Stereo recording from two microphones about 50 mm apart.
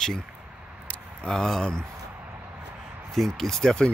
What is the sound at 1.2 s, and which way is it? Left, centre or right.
Speech, centre.